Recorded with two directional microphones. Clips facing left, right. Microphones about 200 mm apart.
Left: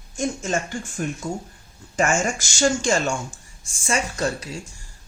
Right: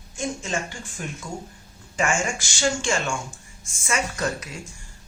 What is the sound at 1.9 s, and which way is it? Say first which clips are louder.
Speech: left 3 dB; 45° left (ahead or behind).